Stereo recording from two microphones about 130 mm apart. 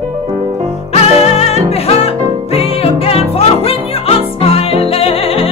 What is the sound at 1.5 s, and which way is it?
Music, 50° left (ahead or behind).